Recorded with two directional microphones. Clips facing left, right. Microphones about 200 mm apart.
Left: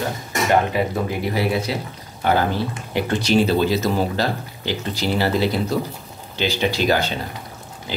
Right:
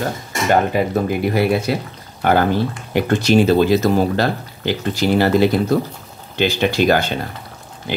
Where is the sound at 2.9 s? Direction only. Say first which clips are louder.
Right 4 dB; 45° right (ahead or behind).